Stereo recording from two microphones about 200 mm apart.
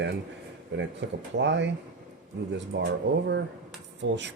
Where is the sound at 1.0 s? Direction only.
65° right (ahead or behind).